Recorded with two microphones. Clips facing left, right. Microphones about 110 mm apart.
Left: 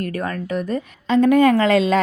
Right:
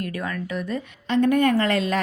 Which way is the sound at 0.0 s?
45° left (ahead or behind).